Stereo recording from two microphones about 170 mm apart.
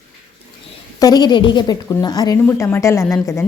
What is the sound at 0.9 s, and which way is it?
A woman's voice, 20° left (ahead or behind).